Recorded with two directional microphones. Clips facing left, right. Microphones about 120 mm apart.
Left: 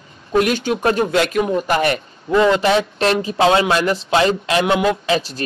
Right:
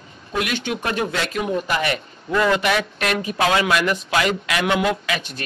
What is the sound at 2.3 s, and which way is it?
A man's voice, 25° left (ahead or behind).